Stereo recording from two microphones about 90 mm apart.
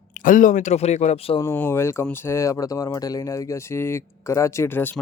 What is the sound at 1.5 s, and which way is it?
Speech, 25° left (ahead or behind).